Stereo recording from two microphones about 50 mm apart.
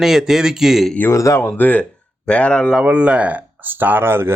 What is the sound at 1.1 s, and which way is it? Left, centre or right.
Speech, left.